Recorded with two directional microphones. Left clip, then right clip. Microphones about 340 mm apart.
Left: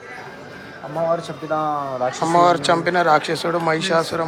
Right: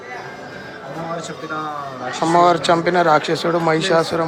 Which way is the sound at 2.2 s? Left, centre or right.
Centre.